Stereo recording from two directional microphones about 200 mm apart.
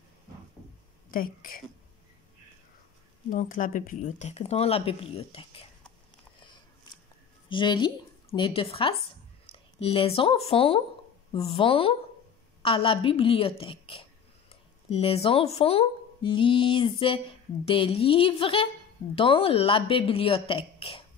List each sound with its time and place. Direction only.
1.1 s speech: 45° left (ahead or behind)
3.3 s speech: 40° left (ahead or behind)
7.4 s a woman's voice: 25° left (ahead or behind)